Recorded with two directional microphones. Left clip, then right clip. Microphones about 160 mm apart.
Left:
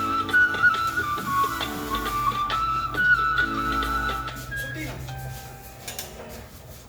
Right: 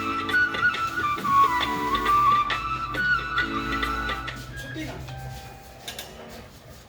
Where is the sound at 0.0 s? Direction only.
40° left (ahead or behind).